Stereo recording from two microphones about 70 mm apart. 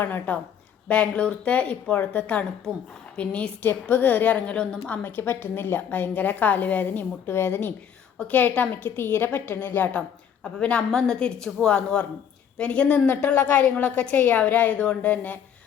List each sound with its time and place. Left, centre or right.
0.0 s a woman's voice: left
0.9 s a woman's voice: centre
3.6 s a woman's voice: left
5.0 s a woman's voice: left
7.3 s speech: left
8.3 s a woman's voice: left
10.4 s a woman's voice: centre